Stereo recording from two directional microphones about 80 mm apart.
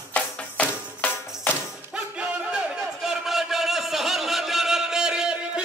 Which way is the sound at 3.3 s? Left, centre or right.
Centre.